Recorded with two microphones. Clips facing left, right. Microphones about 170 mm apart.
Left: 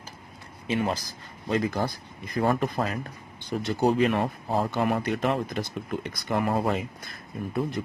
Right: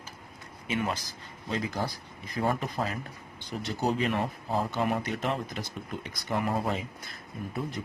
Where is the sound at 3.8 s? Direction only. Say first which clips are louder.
Left 5 dB; 60° left (ahead or behind).